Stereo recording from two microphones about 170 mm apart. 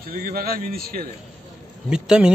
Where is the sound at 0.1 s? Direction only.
55° right (ahead or behind).